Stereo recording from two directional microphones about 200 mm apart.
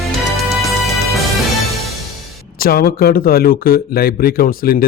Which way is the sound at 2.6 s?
50° left (ahead or behind).